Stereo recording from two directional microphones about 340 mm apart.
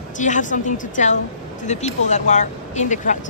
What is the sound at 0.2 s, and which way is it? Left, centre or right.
Speech, left.